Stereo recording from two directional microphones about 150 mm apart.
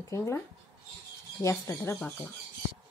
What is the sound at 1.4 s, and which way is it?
Speech, 20° left (ahead or behind).